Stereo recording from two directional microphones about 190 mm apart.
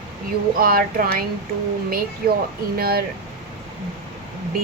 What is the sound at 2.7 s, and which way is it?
Speech, 55° right (ahead or behind).